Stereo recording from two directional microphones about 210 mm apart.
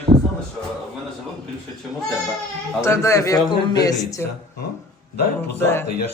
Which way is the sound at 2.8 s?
15° left (ahead or behind).